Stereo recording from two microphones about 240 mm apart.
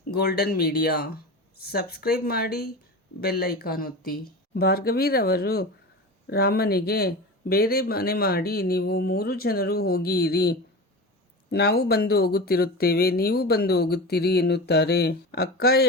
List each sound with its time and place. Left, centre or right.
0.1 s speech: left